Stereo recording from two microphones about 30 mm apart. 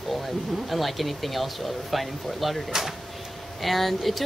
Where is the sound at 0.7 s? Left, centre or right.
Centre.